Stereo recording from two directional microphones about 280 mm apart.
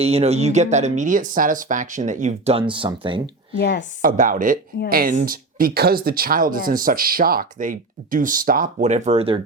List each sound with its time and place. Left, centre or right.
0.0 s speech: right
3.6 s a woman's voice: left
4.0 s speech: right